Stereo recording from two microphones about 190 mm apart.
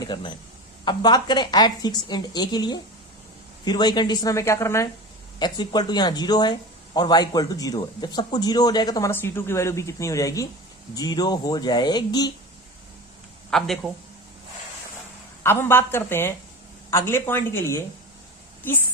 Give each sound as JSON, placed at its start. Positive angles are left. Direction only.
{"t": 0.0, "sound": "speech", "side_deg": 25}
{"t": 13.5, "sound": "speech", "side_deg": 0}
{"t": 15.4, "sound": "a woman's voice", "side_deg": 10}